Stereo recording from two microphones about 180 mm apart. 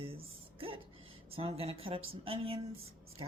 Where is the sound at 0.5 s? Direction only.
30° right (ahead or behind).